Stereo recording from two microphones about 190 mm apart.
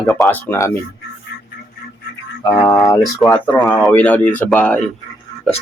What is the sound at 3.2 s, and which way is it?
Speech, centre (ahead or behind).